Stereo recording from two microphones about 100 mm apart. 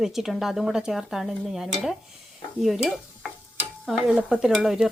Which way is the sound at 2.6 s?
Centre (ahead or behind).